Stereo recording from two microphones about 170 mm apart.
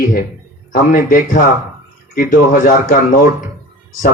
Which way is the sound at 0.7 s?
55° left (ahead or behind).